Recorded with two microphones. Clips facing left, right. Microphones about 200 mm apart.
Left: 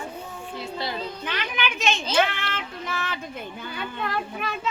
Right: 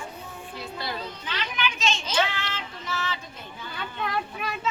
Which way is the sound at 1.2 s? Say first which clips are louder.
Left 1 dB; 55° left (ahead or behind).